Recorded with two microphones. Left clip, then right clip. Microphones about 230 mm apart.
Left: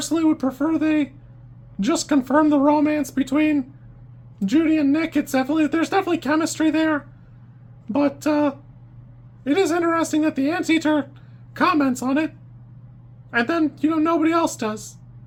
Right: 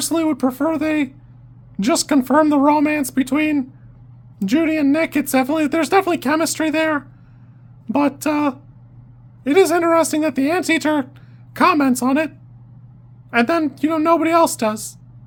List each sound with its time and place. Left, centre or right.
0.0 s speech: right
13.3 s speech: right